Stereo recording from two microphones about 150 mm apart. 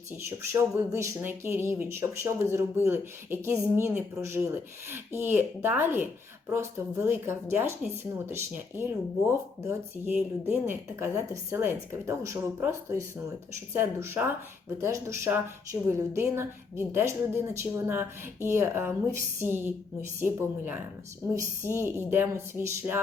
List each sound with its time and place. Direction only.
0.8 s speech: 20° right (ahead or behind)
10.2 s speech: 10° right (ahead or behind)